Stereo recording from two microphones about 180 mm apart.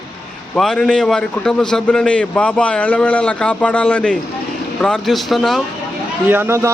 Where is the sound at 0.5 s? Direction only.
5° left (ahead or behind).